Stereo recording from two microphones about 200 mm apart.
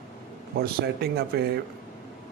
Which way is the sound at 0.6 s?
50° right (ahead or behind).